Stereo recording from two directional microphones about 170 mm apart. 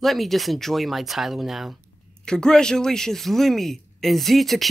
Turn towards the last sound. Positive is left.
turn(degrees=0)  # may be behind; listen again after turning